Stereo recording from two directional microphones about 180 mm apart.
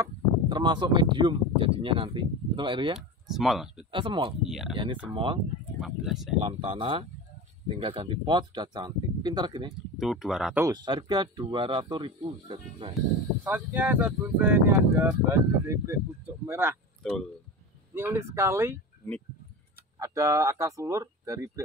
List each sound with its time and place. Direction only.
0.0 s speech: 25° right (ahead or behind)
3.0 s speech: centre (ahead or behind)
3.9 s speech: 30° right (ahead or behind)
4.5 s speech: centre (ahead or behind)
5.1 s speech: 25° right (ahead or behind)
5.8 s speech: centre (ahead or behind)
6.4 s speech: 30° right (ahead or behind)
9.9 s speech: centre (ahead or behind)
10.6 s speech: 25° right (ahead or behind)
12.9 s speech: 10° right (ahead or behind)
17.0 s speech: 5° left (ahead or behind)
17.9 s speech: 15° right (ahead or behind)
20.0 s speech: 15° right (ahead or behind)